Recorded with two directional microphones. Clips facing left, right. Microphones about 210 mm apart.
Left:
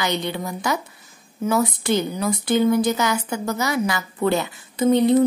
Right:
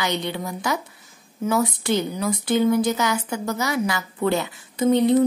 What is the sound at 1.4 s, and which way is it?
Speech, 45° left (ahead or behind).